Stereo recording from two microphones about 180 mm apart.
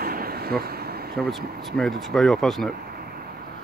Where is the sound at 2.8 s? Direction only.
55° right (ahead or behind).